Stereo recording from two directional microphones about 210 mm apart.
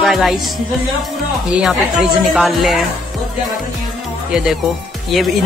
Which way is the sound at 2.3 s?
Centre (ahead or behind).